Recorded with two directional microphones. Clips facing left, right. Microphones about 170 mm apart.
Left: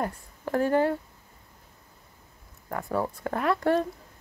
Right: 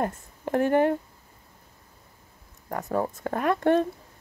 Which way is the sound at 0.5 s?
20° right (ahead or behind).